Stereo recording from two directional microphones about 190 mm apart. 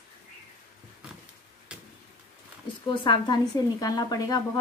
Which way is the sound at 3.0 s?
20° left (ahead or behind).